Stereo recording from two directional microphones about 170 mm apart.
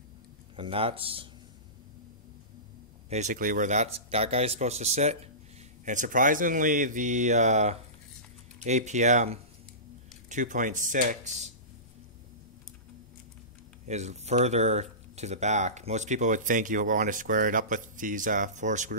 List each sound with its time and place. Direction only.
0.6 s speech: 30° right (ahead or behind)
3.1 s speech: 45° right (ahead or behind)
13.8 s speech: 40° right (ahead or behind)